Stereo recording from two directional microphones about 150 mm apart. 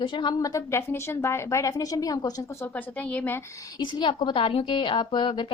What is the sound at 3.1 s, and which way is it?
Speech, 10° left (ahead or behind).